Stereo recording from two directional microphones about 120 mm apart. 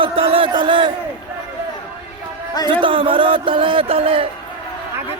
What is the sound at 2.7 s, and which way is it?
Speech, 45° right (ahead or behind).